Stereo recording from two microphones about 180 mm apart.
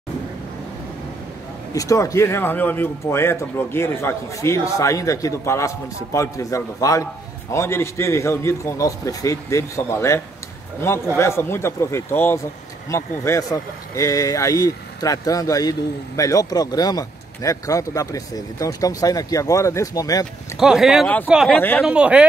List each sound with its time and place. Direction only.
1.7 s speech: 20° left (ahead or behind)
20.5 s speech: 5° right (ahead or behind)
21.5 s speech: 10° left (ahead or behind)
21.8 s speech: 5° right (ahead or behind)